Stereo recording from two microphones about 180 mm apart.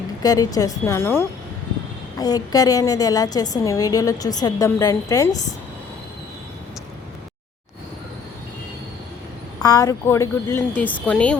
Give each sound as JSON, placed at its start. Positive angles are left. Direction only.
{"t": 0.2, "sound": "a woman's voice", "side_deg": 20}
{"t": 9.6, "sound": "a woman's voice", "side_deg": 20}